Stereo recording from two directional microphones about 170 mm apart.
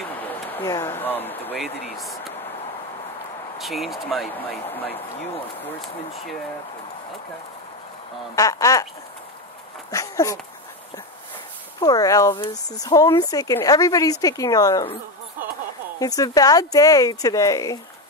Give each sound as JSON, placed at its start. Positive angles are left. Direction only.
{"t": 0.2, "sound": "speech", "side_deg": 10}
{"t": 1.6, "sound": "speech", "side_deg": 0}
{"t": 3.5, "sound": "speech", "side_deg": 0}
{"t": 8.4, "sound": "speech", "side_deg": 20}
{"t": 9.8, "sound": "speech", "side_deg": 20}
{"t": 11.8, "sound": "speech", "side_deg": 20}
{"t": 16.0, "sound": "speech", "side_deg": 20}